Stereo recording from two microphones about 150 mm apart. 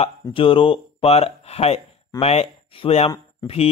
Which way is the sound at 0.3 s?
35° left (ahead or behind).